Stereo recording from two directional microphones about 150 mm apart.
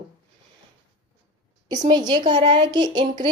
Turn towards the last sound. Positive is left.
turn(degrees=-30)  # may be behind; listen again after turning